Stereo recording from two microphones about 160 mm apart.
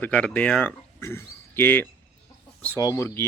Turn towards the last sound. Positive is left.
turn(degrees=20)  # may be behind; listen again after turning